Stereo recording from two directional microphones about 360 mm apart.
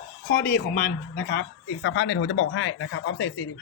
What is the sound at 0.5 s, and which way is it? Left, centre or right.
Speech, left.